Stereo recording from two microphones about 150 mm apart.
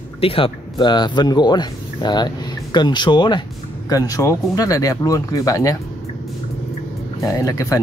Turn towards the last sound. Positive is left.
turn(degrees=20)  # may be behind; listen again after turning